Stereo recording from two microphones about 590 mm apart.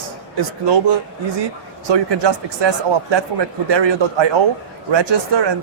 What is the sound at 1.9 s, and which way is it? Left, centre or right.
Speech, right.